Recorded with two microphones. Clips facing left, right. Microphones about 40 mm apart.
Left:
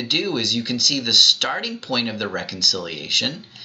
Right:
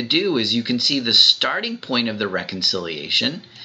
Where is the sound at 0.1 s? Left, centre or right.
Centre.